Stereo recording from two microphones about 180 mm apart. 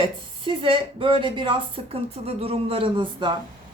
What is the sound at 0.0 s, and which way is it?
Speech, 30° right (ahead or behind).